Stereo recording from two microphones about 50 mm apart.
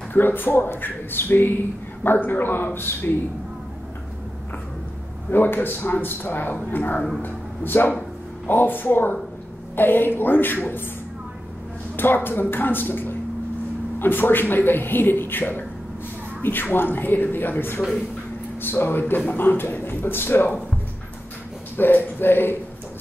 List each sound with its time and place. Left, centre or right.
0.1 s a man's voice: left
5.3 s a man's voice: left
12.0 s a man's voice: left
21.7 s a man's voice: left